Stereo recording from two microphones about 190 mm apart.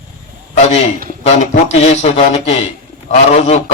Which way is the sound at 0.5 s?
35° left (ahead or behind).